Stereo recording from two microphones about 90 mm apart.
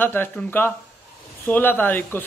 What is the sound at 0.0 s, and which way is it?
Speech, 25° left (ahead or behind).